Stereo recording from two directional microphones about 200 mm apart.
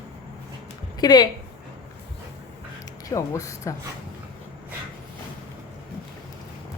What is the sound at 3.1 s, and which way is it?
Speech, 15° left (ahead or behind).